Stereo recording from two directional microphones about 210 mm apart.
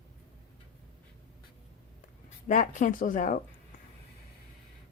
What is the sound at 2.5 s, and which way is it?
Speech, 40° left (ahead or behind).